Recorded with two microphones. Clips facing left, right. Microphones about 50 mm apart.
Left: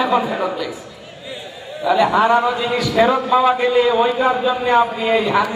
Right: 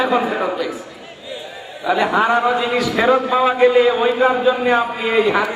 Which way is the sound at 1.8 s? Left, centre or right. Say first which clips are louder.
Left 2 dB; centre.